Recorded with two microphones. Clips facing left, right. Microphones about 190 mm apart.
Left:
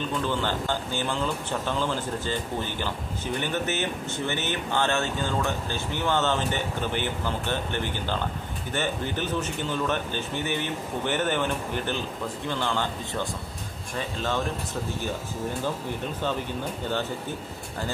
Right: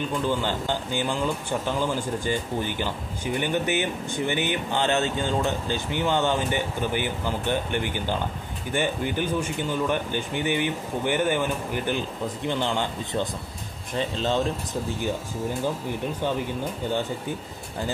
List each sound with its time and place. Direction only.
0.4 s speech: 15° right (ahead or behind)